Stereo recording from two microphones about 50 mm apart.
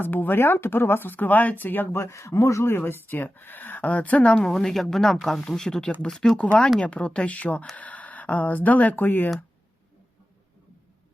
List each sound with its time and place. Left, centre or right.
0.0 s speech: left
2.0 s a man's voice: left
2.6 s speech: left
4.4 s speech: centre; by 9.3 s left